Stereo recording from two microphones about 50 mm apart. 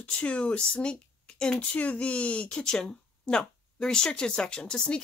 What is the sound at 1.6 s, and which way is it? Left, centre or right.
Speech, left.